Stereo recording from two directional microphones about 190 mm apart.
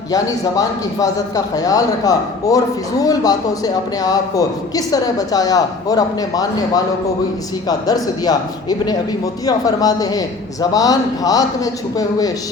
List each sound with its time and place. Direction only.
0.1 s a man's voice: 20° left (ahead or behind)
9.5 s a man's voice: 20° left (ahead or behind)